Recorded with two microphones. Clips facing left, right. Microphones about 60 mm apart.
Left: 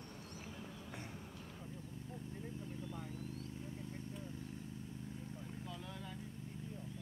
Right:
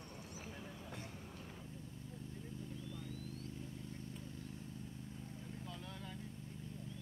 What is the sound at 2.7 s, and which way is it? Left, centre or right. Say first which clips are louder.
Vehicle: left 2 dB; left.